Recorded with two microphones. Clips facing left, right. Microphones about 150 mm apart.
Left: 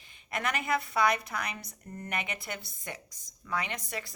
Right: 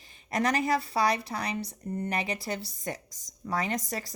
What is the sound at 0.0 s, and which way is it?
A woman's voice, 40° right (ahead or behind).